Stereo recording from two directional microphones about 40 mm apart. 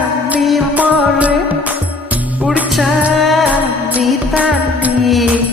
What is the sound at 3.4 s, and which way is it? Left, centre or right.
Music, right.